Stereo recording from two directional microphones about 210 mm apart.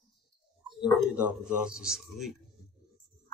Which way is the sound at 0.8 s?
5° right (ahead or behind).